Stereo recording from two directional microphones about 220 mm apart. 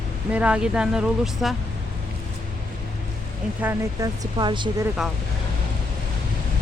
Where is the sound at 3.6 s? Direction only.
20° right (ahead or behind).